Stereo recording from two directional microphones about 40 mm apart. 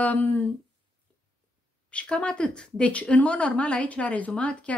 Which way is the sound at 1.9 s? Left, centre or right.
Left.